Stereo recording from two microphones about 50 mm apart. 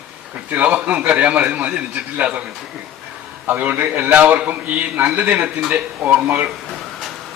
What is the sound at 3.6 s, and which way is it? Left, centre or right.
A man's voice, right.